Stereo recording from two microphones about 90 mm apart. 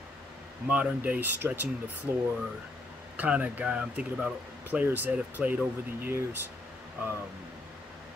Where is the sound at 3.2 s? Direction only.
15° right (ahead or behind).